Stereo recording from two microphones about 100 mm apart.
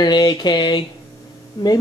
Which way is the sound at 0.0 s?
45° left (ahead or behind).